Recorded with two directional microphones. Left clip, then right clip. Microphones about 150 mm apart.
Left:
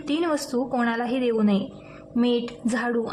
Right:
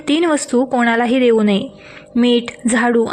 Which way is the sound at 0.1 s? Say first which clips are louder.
Right 10 dB; 35° right (ahead or behind).